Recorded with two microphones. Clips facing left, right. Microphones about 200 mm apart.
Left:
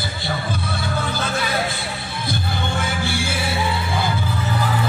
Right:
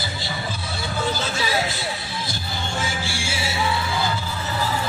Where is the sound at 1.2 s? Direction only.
55° left (ahead or behind).